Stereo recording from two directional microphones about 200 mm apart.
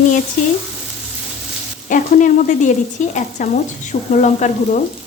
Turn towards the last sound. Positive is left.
turn(degrees=35)  # may be behind; listen again after turning